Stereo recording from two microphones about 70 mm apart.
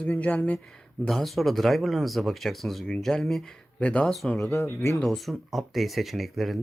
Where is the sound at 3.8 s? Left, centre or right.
Centre.